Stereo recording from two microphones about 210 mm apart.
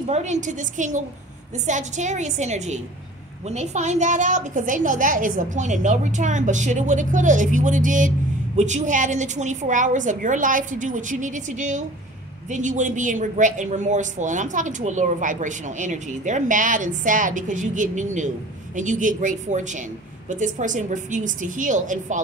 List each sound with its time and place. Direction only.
0.0 s speech: 35° right (ahead or behind)